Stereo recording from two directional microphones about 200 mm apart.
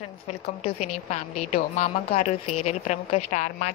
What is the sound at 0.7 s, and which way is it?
A woman's voice, 35° left (ahead or behind).